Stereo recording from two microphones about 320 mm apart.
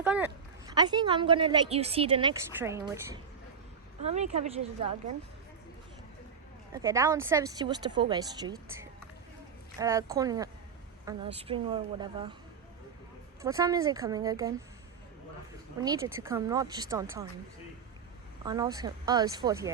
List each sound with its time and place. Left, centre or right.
0.0 s a sound: centre
0.7 s a woman's voice: centre
4.1 s speech: right
6.7 s a woman's voice: centre
9.7 s a woman's voice: centre
13.4 s a woman's voice: centre
15.8 s a woman's voice: centre
18.4 s a woman's voice: centre